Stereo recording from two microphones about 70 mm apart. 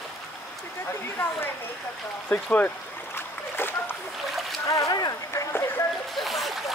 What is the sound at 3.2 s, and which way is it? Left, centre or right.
Boat, left.